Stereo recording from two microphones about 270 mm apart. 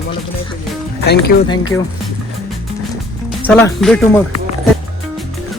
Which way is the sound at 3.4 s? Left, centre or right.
Centre.